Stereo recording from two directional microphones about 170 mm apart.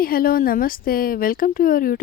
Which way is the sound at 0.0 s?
60° left (ahead or behind).